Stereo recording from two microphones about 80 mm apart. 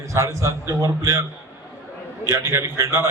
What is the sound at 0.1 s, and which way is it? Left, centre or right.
A man's voice, right.